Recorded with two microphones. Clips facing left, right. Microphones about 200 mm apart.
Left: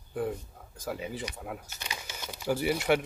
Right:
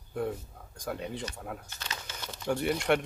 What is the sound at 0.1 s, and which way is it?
Speech, centre (ahead or behind).